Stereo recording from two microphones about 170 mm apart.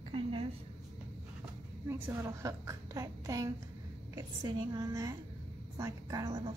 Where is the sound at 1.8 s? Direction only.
15° right (ahead or behind).